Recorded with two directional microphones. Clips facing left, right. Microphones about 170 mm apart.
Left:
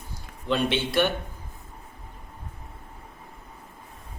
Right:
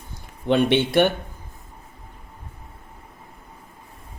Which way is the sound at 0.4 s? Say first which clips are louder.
Right 7 dB; 60° right (ahead or behind).